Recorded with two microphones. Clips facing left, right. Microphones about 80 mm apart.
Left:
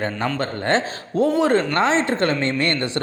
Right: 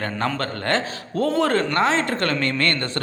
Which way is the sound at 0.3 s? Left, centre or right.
Centre.